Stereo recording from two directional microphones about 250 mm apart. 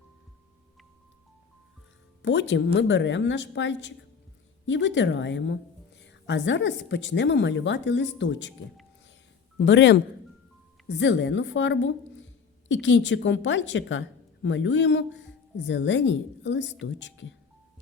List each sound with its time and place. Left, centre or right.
2.2 s a woman's voice: left
9.6 s a woman's voice: left